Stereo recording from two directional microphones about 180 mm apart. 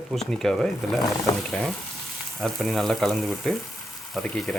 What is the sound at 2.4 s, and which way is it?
Speech, centre (ahead or behind).